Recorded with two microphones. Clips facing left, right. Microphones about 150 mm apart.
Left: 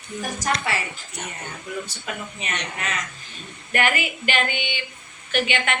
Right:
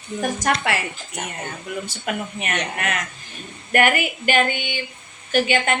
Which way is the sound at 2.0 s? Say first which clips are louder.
Right 5 dB; 60° right (ahead or behind).